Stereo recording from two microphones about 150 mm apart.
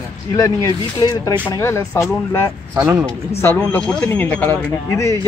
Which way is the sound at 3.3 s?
10° left (ahead or behind).